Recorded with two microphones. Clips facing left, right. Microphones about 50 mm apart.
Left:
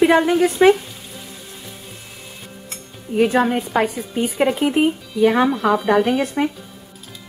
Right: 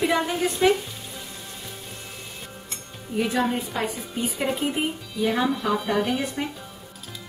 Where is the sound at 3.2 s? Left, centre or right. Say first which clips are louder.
Left 7 dB; left.